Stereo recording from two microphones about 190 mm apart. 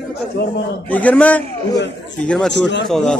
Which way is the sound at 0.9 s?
5° left (ahead or behind).